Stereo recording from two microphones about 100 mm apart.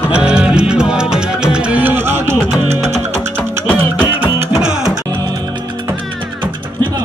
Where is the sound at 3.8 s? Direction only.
20° right (ahead or behind).